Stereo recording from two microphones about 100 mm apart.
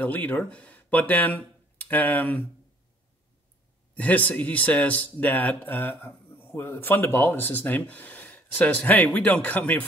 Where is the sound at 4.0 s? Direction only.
15° left (ahead or behind).